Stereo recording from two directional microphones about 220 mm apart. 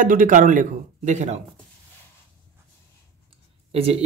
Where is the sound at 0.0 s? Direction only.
35° right (ahead or behind).